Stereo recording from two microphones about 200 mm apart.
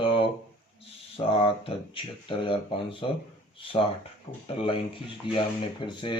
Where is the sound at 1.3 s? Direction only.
30° left (ahead or behind).